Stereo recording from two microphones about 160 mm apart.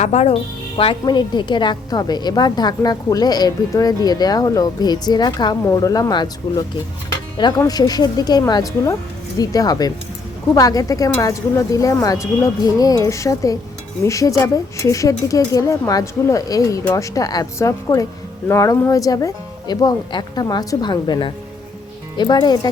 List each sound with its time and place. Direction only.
0.0 s speech: 45° left (ahead or behind)
0.8 s a woman's voice: 30° left (ahead or behind)